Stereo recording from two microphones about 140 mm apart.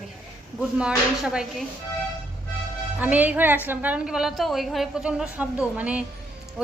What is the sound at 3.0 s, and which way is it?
A woman's voice, 10° right (ahead or behind).